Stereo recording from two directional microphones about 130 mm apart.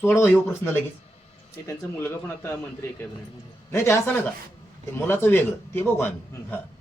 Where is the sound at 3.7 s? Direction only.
20° left (ahead or behind).